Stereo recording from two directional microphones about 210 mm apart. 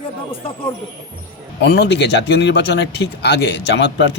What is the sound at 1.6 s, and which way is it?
Speech, 55° left (ahead or behind).